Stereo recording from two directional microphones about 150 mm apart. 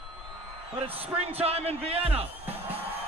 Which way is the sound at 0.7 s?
40° right (ahead or behind).